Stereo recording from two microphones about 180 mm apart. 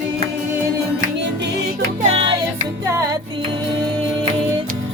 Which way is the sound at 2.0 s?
35° right (ahead or behind).